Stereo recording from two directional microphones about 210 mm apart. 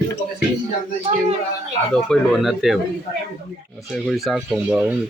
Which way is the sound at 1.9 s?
Centre (ahead or behind).